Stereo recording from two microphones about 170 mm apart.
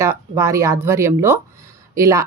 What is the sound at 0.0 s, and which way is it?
Speech, 15° right (ahead or behind).